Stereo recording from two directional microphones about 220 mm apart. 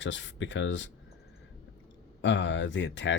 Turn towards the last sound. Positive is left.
turn(degrees=55)  # may be behind; listen again after turning